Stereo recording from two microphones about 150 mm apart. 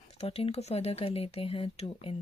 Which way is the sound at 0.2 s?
40° left (ahead or behind).